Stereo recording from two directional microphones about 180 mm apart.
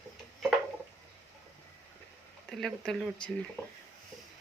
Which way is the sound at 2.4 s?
Centre (ahead or behind).